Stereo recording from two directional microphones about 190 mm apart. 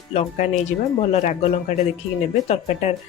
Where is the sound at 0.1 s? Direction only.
40° left (ahead or behind).